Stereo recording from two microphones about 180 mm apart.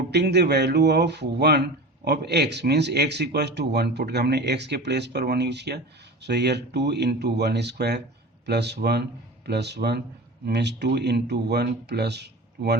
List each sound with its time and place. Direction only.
0.1 s speech: 70° right (ahead or behind)